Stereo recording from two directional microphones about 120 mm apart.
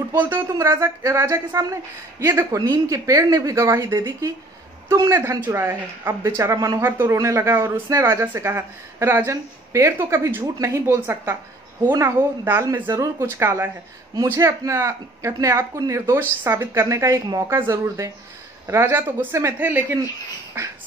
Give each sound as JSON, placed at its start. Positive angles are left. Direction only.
{"t": 0.2, "sound": "speech", "side_deg": -20}